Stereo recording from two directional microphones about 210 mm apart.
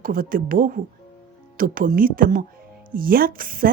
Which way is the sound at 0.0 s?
40° right (ahead or behind).